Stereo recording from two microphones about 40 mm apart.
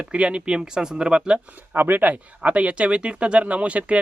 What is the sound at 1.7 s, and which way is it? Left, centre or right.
Speech, right.